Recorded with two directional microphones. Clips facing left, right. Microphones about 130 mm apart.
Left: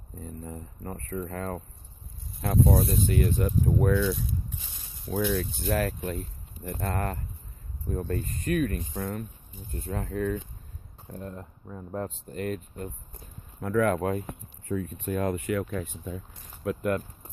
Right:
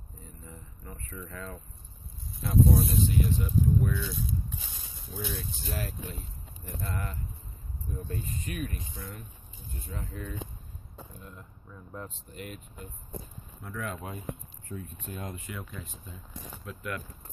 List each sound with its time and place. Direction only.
0.2 s speech: 50° left (ahead or behind)
2.4 s speech: 65° left (ahead or behind)
3.6 s speech: 75° left (ahead or behind); by 10.4 s 60° left (ahead or behind)
11.1 s speech: 45° left (ahead or behind)
13.6 s speech: 70° left (ahead or behind)
14.7 s speech: 80° left; by 16.2 s 65° left (ahead or behind)
16.6 s speech: 45° left (ahead or behind)